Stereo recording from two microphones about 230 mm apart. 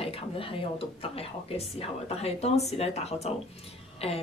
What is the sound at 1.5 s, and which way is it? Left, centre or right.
A woman's voice, left.